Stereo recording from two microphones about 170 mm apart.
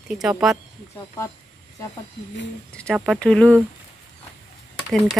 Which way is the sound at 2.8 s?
5° left (ahead or behind).